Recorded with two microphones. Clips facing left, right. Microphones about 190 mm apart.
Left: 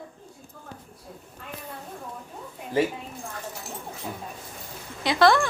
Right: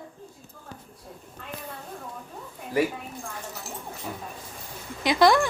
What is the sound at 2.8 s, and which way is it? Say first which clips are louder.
Speech: left 1 dB; 25° left (ahead or behind).